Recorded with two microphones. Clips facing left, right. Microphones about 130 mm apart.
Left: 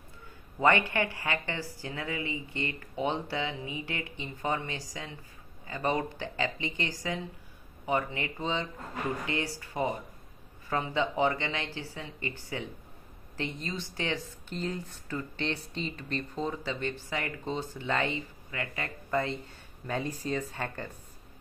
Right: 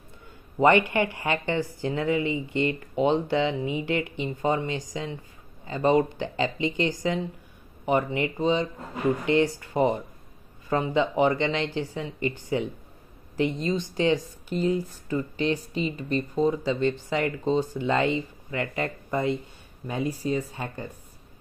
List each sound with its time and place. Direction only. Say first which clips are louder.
0.6 s a woman's voice: right 6 dB; 20° right (ahead or behind)